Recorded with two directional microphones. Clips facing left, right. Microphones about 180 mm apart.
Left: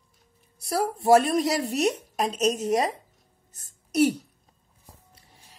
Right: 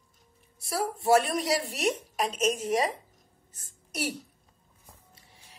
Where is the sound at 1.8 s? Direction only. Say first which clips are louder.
Left 4 dB; 40° left (ahead or behind).